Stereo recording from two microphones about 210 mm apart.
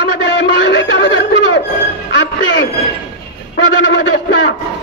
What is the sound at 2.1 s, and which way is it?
A man's voice, 60° left (ahead or behind).